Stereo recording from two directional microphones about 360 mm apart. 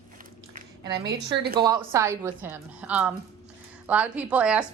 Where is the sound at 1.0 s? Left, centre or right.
Right.